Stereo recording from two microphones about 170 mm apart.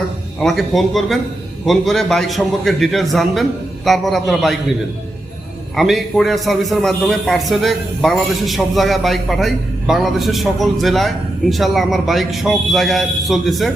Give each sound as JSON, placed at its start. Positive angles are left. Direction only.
{"t": 0.3, "sound": "a man's voice", "side_deg": 0}
{"t": 5.7, "sound": "a man's voice", "side_deg": 0}